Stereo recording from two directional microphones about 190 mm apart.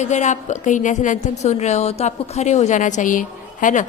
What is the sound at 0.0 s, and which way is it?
A woman's voice, 40° left (ahead or behind).